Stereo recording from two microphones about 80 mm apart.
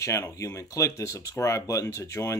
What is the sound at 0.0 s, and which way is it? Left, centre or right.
Speech, left.